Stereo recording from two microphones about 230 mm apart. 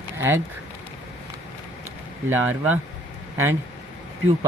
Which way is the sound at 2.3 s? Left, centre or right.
Centre.